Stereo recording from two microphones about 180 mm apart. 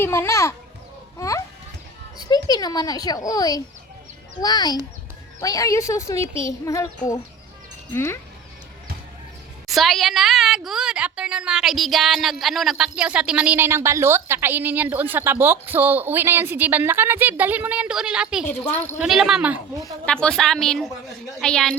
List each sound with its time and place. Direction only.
0.0 s a woman's voice: 15° left (ahead or behind)
2.1 s a child's voice: 20° left (ahead or behind)
6.2 s a child's voice: 30° right (ahead or behind)
6.7 s a woman's voice: 15° left (ahead or behind)
9.6 s a woman's voice: centre (ahead or behind)
18.4 s a woman's voice: 10° left (ahead or behind)
18.9 s a woman's voice: centre (ahead or behind)
20.1 s a woman's voice: 5° left (ahead or behind)